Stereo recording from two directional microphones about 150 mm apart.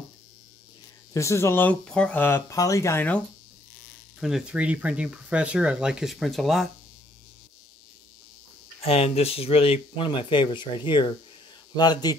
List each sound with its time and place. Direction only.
1.1 s speech: 20° left (ahead or behind)
4.2 s speech: 5° right (ahead or behind)
8.8 s speech: 40° left (ahead or behind)